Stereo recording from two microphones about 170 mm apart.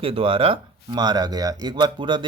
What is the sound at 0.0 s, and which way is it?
Speech, 35° right (ahead or behind).